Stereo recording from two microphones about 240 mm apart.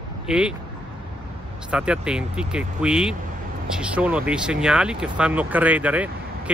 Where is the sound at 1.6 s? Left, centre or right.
Centre.